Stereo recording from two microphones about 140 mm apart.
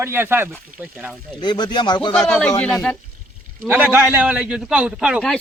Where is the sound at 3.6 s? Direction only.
15° right (ahead or behind).